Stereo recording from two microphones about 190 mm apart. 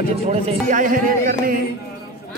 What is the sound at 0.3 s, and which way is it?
Speech, 40° right (ahead or behind).